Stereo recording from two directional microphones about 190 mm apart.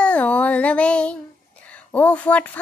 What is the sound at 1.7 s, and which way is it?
Speech, 10° left (ahead or behind).